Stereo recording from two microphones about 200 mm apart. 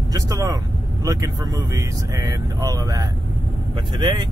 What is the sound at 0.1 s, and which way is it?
Speech, 15° right (ahead or behind).